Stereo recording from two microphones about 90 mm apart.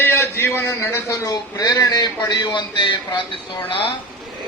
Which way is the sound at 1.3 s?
45° left (ahead or behind).